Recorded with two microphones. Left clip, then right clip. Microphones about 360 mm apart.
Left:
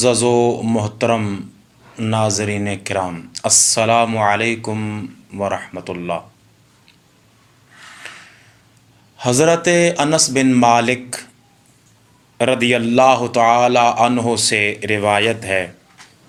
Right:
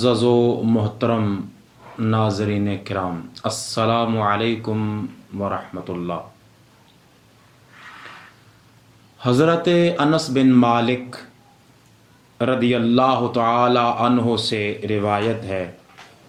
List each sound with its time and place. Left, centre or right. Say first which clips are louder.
0.0 s a man's voice: left 3 dB; centre
9.1 s speech: left 3 dB; centre
12.4 s a man's voice: left 4 dB; centre